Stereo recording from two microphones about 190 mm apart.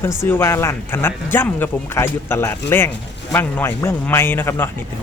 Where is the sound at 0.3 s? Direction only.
10° left (ahead or behind).